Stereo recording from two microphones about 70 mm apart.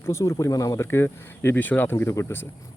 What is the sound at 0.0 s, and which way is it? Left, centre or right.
Speech, left.